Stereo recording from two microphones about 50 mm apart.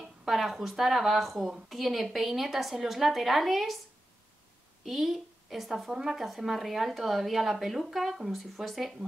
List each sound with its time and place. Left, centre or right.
0.0 s a woman's voice: centre
4.8 s a woman's voice: centre